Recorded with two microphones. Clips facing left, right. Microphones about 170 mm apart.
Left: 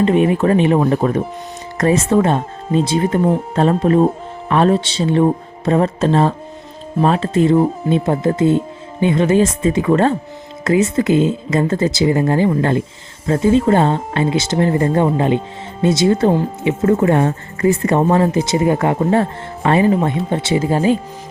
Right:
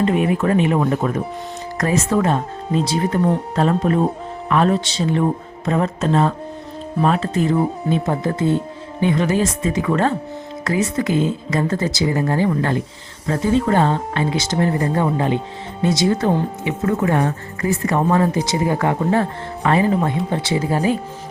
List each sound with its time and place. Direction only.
0.0 s speech: 25° left (ahead or behind)